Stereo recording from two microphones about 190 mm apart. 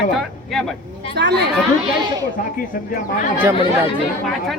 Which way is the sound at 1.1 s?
65° right (ahead or behind).